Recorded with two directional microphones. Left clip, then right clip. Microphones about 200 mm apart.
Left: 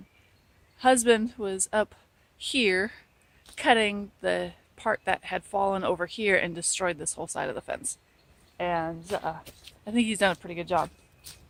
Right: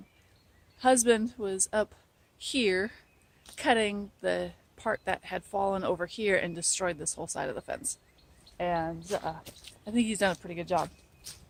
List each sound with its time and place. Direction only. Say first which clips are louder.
0.8 s a woman's voice: left 3 dB; 25° left (ahead or behind)
9.4 s a sound: left 1 dB; 5° left (ahead or behind)
9.8 s a woman's voice: left 3 dB; 20° left (ahead or behind)